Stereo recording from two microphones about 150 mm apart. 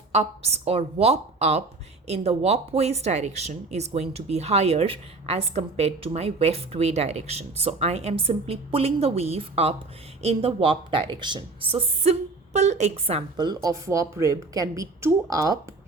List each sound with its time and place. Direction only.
0.1 s a woman's voice: 45° right (ahead or behind)
12.5 s speech: 50° right (ahead or behind)
13.3 s a woman's voice: 25° right (ahead or behind)